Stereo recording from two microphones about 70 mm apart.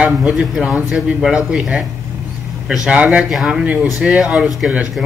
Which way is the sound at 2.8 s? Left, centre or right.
Centre.